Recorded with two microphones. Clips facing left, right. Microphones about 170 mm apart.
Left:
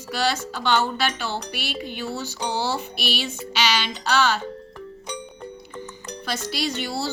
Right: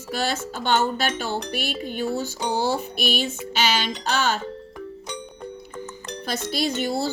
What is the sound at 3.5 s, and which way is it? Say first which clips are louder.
Music: even; 45° right (ahead or behind).